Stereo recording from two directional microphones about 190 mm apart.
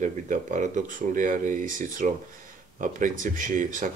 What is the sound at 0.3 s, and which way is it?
Speech, 40° right (ahead or behind).